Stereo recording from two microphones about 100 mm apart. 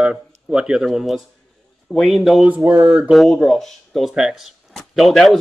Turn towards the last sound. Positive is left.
turn(degrees=0)  # may be behind; listen again after turning